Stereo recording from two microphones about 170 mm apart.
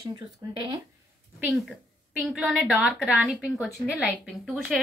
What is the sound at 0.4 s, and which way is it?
Speech, 20° right (ahead or behind).